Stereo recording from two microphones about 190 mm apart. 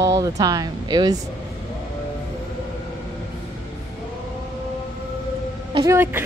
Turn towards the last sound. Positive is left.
turn(degrees=-15)  # may be behind; listen again after turning